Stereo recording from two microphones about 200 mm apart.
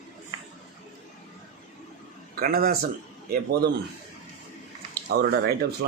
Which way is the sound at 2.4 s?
50° right (ahead or behind).